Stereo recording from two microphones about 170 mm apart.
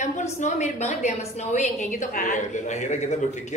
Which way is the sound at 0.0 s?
45° left (ahead or behind).